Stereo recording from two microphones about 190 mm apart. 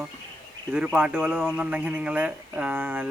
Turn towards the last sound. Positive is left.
turn(degrees=-10)  # may be behind; listen again after turning